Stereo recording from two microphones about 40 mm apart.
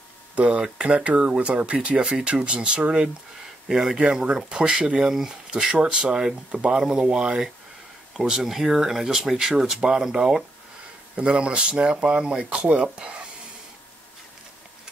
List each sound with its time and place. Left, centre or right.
0.4 s speech: right
3.6 s speech: centre
5.8 s speech: right
11.1 s speech: right
12.4 s speech: right
12.7 s speech: right